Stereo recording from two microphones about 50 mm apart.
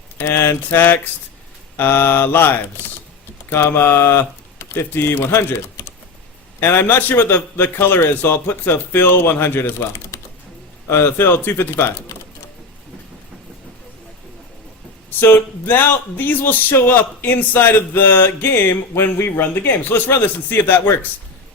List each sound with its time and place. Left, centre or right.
0.2 s a man's voice: left
3.5 s a man's voice: left
15.1 s a man's voice: left
20.1 s a man's voice: left